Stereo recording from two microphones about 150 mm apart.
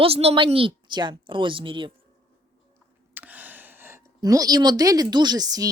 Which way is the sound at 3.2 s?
10° right (ahead or behind).